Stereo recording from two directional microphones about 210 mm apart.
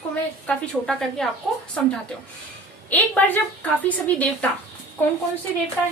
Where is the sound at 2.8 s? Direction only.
10° left (ahead or behind).